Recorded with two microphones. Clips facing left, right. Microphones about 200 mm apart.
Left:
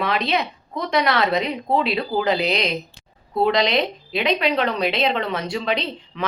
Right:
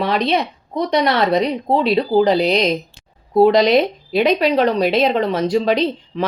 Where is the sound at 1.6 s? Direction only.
35° right (ahead or behind).